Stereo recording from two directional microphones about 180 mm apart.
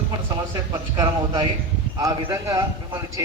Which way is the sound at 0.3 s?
20° right (ahead or behind).